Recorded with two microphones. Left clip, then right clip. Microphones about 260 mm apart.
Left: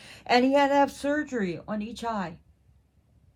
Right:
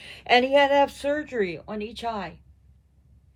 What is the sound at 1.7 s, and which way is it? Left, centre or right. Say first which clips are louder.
Speech: right 2 dB; left.